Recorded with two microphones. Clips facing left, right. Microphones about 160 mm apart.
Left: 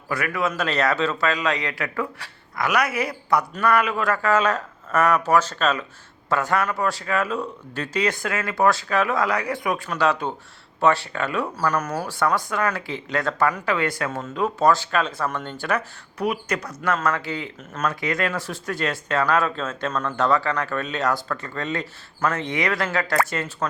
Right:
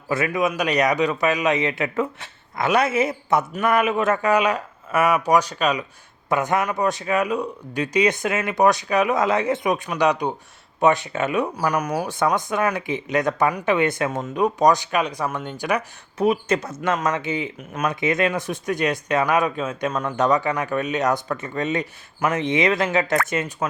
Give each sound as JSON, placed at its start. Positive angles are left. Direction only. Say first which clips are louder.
{"t": 0.1, "sound": "a man's voice", "louder": "right 3 dB", "side_deg": -20}